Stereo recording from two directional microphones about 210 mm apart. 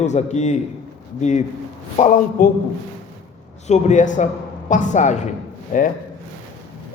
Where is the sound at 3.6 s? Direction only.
35° left (ahead or behind).